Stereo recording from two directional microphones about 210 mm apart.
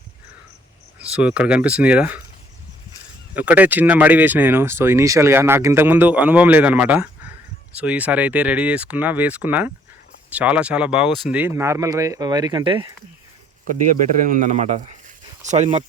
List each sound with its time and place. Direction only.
0.9 s speech: 5° right (ahead or behind)
3.3 s speech: 10° right (ahead or behind)
13.8 s speech: 40° right (ahead or behind)